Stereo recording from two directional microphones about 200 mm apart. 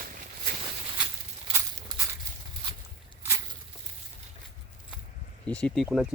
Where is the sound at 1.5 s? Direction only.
30° right (ahead or behind).